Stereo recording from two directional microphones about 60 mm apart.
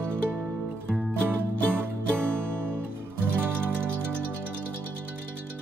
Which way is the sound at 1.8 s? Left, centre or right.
Right.